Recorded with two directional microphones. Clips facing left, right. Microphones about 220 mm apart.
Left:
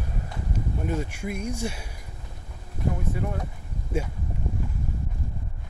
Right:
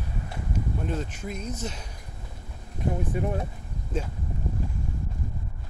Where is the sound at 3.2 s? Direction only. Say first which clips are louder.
Right 3 dB; 25° right (ahead or behind).